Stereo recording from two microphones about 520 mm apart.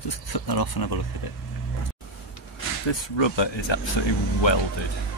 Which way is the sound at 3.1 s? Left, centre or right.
Left.